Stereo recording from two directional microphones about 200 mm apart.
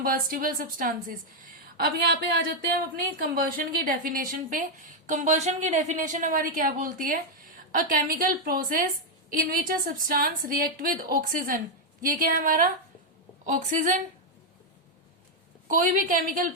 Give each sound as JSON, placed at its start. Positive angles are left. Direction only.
{"t": 0.0, "sound": "a woman's voice", "side_deg": -45}
{"t": 15.6, "sound": "speech", "side_deg": -40}